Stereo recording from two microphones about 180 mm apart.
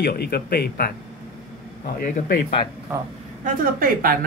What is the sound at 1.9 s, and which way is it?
Speech, 50° left (ahead or behind).